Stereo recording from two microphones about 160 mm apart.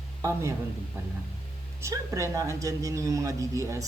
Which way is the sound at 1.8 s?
20° right (ahead or behind).